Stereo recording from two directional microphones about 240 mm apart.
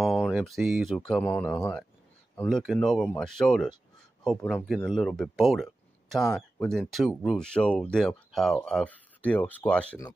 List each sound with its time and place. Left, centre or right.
0.0 s speech: centre